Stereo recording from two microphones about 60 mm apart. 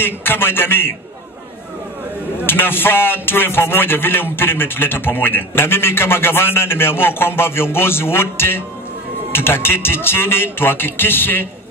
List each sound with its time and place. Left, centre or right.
0.0 s a man's voice: left
2.4 s a man's voice: left